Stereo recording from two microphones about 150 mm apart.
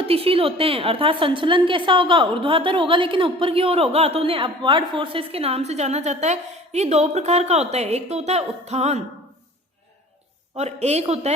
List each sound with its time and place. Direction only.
0.0 s a woman's voice: 40° right (ahead or behind)
10.6 s a man's voice: 45° right (ahead or behind)